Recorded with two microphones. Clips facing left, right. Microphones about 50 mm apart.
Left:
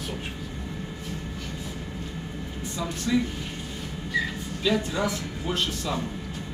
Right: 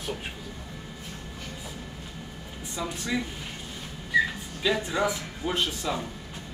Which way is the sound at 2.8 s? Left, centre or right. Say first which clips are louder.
Left 4 dB; centre.